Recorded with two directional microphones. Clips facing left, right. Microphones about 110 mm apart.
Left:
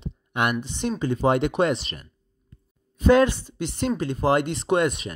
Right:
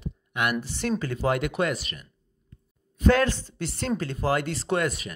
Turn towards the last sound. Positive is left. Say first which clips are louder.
# left 4 dB
turn(degrees=20)  # may be behind; listen again after turning